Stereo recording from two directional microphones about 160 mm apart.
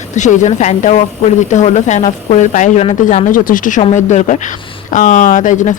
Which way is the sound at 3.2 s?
60° left (ahead or behind).